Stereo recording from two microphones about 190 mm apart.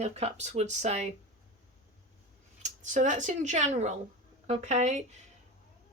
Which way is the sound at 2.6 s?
40° right (ahead or behind).